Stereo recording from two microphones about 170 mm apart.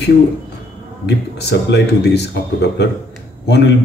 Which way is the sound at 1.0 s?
80° left.